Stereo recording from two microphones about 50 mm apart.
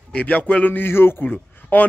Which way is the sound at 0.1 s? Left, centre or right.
Left.